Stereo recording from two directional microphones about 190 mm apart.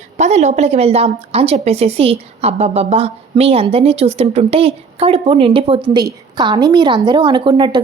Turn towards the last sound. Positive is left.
turn(degrees=-25)  # may be behind; listen again after turning